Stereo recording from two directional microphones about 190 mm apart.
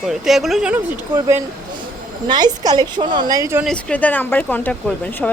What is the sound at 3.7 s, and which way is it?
A woman's voice, 5° left (ahead or behind).